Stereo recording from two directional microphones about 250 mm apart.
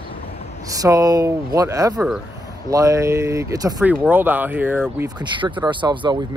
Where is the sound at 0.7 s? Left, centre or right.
Centre.